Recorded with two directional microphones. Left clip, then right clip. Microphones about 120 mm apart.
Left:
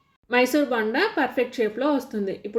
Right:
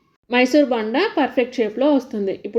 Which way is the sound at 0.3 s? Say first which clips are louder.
Right 5 dB; 35° right (ahead or behind).